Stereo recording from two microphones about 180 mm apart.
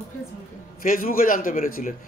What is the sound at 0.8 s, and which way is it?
Speech, 50° left (ahead or behind).